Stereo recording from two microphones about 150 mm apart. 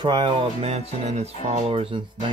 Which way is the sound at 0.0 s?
30° right (ahead or behind).